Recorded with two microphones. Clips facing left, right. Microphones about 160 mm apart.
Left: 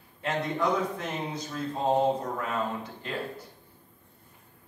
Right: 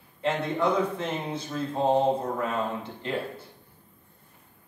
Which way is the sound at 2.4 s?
25° right (ahead or behind).